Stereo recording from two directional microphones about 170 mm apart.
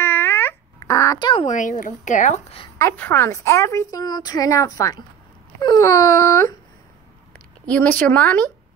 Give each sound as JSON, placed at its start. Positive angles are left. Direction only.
{"t": 0.0, "sound": "a sound", "side_deg": 10}
{"t": 1.3, "sound": "speech", "side_deg": 45}
{"t": 2.8, "sound": "a woman's voice", "side_deg": 15}
{"t": 7.3, "sound": "a woman's voice", "side_deg": 10}